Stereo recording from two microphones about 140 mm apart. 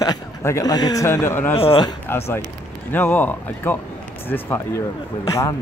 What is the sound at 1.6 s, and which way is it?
Speech, 40° left (ahead or behind).